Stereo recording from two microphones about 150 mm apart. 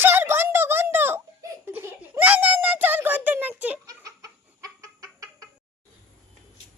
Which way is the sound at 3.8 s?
25° right (ahead or behind).